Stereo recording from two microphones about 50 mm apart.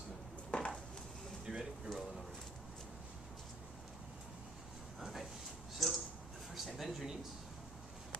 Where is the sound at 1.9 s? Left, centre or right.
Centre.